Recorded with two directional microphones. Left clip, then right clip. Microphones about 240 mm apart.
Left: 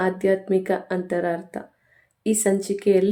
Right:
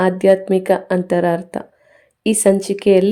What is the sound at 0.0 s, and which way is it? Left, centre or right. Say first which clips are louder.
A woman's voice: right 8 dB; right.